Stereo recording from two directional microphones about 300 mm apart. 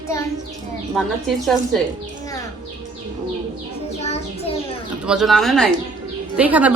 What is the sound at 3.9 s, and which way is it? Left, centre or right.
Child singing, left.